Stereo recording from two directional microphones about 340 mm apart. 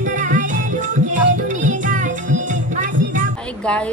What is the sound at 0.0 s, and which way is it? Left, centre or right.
Music, right.